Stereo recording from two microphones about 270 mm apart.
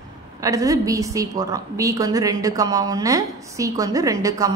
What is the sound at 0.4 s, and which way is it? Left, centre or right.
A woman's voice, centre.